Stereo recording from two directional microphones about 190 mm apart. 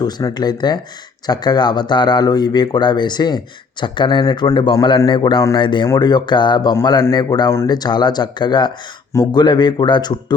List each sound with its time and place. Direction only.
0.0 s speech: 20° left (ahead or behind)